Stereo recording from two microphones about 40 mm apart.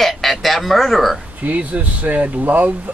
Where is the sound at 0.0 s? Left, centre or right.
Centre.